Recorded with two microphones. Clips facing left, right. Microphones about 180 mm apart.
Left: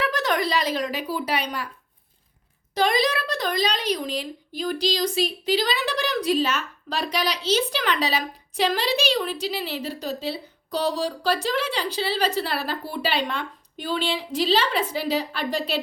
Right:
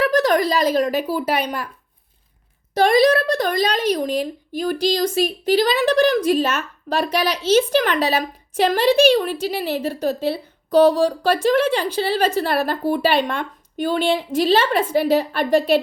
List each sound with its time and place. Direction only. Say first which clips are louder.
0.0 s speech: right 7 dB; 40° right (ahead or behind)
2.7 s speech: right 8 dB; 50° right (ahead or behind)